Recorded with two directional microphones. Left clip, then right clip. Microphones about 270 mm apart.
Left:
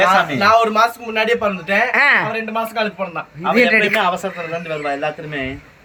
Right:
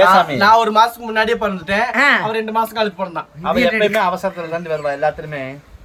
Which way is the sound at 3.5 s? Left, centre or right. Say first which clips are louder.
Left 2 dB; centre.